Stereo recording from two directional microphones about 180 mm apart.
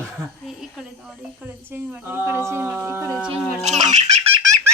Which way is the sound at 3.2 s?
40° right (ahead or behind).